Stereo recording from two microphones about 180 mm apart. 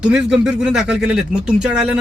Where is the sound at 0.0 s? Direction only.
5° right (ahead or behind).